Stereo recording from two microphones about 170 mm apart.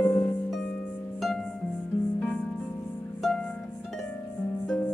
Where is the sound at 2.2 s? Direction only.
10° left (ahead or behind).